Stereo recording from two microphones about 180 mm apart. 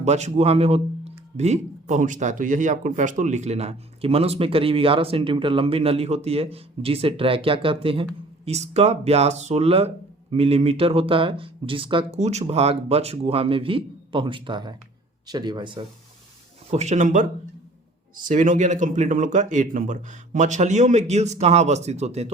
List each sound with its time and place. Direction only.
0.0 s speech: 40° right (ahead or behind)
16.7 s speech: 40° right (ahead or behind)